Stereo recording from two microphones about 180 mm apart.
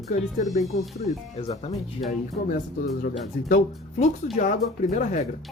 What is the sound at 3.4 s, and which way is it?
Speech, 45° left (ahead or behind).